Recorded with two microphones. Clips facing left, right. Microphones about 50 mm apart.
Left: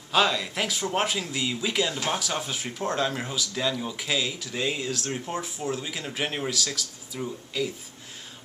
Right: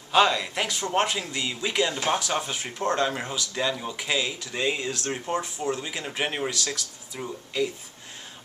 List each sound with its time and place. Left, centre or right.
0.1 s speech: centre
7.2 s speech: centre
7.5 s speech: centre